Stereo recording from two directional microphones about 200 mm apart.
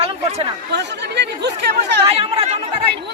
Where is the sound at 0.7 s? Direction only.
55° right (ahead or behind).